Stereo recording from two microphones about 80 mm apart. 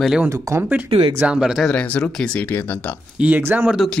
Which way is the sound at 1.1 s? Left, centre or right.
Centre.